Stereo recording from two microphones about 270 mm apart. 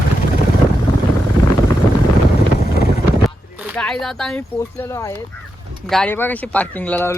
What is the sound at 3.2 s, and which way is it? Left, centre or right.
Speech, centre.